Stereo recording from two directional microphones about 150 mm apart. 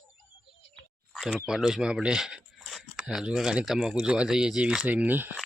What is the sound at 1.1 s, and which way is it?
Speech, centre (ahead or behind).